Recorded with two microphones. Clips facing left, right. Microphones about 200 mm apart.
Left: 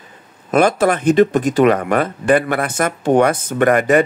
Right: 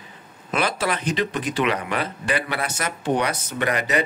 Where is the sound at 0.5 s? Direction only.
50° left (ahead or behind).